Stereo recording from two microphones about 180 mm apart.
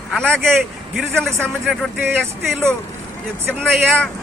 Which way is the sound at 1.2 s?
Centre (ahead or behind).